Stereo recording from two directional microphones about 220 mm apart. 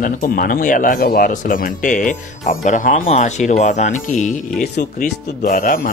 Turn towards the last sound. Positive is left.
turn(degrees=40)  # may be behind; listen again after turning